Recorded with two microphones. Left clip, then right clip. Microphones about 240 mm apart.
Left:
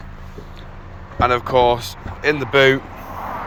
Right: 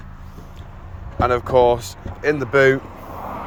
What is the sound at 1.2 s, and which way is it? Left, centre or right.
Speech, centre.